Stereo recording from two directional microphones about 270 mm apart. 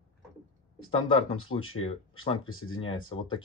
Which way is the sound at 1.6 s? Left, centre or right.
Left.